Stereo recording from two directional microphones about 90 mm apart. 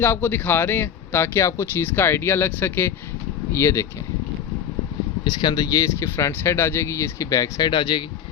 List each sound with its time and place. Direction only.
0.0 s speech: 20° left (ahead or behind)
5.2 s speech: 55° left (ahead or behind)
5.9 s speech: 30° left (ahead or behind)
7.6 s speech: 60° left (ahead or behind)